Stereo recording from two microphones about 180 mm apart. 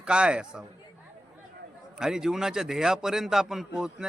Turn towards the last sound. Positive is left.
turn(degrees=-5)  # may be behind; listen again after turning